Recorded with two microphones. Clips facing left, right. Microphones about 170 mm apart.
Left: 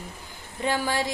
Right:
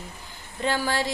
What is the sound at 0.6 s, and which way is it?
Speech, 15° left (ahead or behind).